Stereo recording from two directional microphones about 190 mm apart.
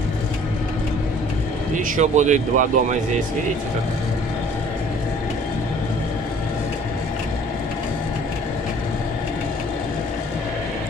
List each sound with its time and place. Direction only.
2.0 s speech: 40° right (ahead or behind)